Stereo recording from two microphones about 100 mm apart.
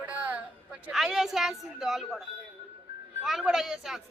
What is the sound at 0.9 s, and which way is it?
Speech, 5° right (ahead or behind).